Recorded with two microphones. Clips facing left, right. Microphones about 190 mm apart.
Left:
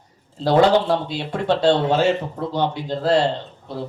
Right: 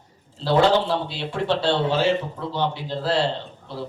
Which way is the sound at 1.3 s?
45° left (ahead or behind).